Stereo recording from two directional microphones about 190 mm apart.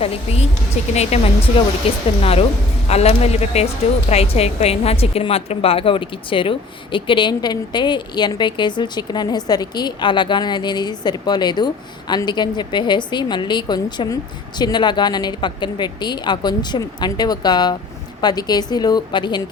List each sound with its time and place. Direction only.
0.0 s a woman's voice: 30° left (ahead or behind)